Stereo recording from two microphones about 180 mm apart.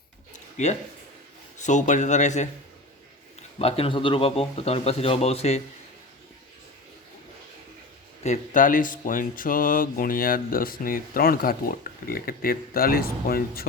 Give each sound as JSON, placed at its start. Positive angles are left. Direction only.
{"t": 0.3, "sound": "a sound", "side_deg": 40}
{"t": 1.5, "sound": "speech", "side_deg": 40}
{"t": 3.6, "sound": "speech", "side_deg": 35}
{"t": 8.2, "sound": "speech", "side_deg": 45}